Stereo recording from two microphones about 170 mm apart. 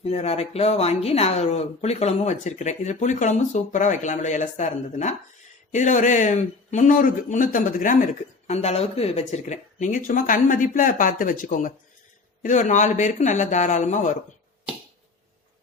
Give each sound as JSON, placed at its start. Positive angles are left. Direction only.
{"t": 0.0, "sound": "speech", "side_deg": 35}